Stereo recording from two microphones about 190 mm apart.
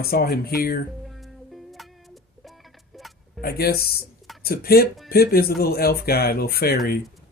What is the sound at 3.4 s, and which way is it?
Speech, 55° left (ahead or behind).